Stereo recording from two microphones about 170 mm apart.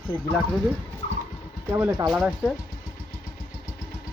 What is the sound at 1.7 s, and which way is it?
Speech, 20° right (ahead or behind).